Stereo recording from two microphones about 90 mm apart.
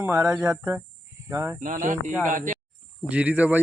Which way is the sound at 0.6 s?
30° right (ahead or behind).